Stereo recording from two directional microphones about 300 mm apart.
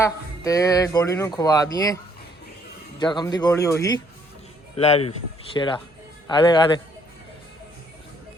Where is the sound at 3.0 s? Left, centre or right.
Centre.